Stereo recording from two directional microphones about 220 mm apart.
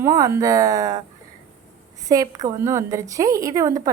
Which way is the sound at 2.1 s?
15° right (ahead or behind).